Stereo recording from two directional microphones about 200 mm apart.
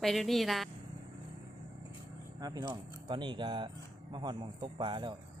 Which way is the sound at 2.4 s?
20° right (ahead or behind).